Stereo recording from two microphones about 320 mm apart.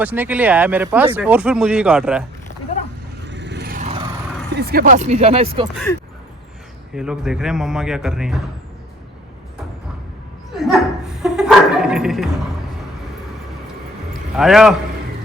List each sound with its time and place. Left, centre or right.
0.0 s speech: centre
3.2 s vehicle: right; by 4.1 s centre
4.5 s speech: right
5.7 s speech: centre
10.5 s dog: centre
14.3 s speech: centre